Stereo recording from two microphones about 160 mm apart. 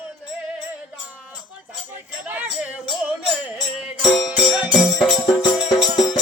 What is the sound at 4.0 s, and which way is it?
Music, centre (ahead or behind).